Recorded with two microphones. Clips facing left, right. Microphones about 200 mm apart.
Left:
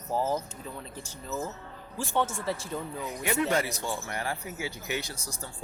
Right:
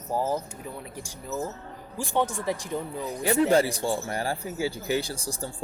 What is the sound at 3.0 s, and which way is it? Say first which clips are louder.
Speech: right 6 dB; 35° right (ahead or behind).